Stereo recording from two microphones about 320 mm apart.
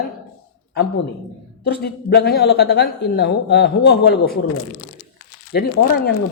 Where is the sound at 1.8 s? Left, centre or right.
Left.